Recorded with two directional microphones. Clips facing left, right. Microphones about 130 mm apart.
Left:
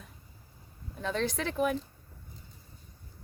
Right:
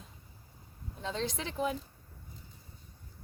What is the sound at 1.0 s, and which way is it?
Speech, 20° right (ahead or behind).